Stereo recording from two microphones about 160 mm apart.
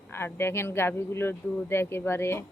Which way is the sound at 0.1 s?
15° left (ahead or behind).